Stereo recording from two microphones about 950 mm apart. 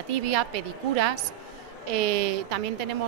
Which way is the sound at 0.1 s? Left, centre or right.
Right.